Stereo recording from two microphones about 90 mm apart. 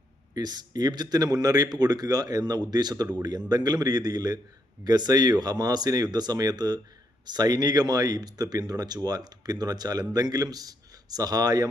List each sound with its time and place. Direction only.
0.3 s speech: 50° right (ahead or behind)